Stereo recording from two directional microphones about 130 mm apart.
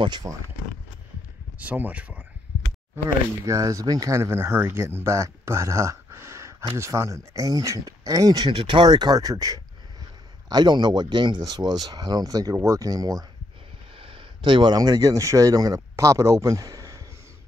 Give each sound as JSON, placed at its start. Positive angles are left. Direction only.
{"t": 0.0, "sound": "speech", "side_deg": -35}
{"t": 1.6, "sound": "speech", "side_deg": -10}
{"t": 3.4, "sound": "speech", "side_deg": -25}
{"t": 8.5, "sound": "speech", "side_deg": -40}
{"t": 13.9, "sound": "speech", "side_deg": -45}